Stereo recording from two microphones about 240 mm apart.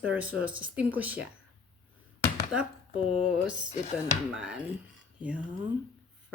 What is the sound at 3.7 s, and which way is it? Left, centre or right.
Speech, left.